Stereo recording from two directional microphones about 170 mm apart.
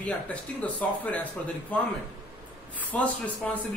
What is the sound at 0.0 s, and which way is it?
Speech, 10° left (ahead or behind).